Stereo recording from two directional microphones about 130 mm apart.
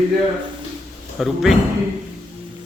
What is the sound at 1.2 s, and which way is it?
Speech, centre (ahead or behind).